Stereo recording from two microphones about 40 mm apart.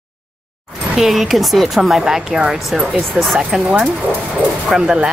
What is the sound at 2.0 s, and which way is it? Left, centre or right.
Speech, centre.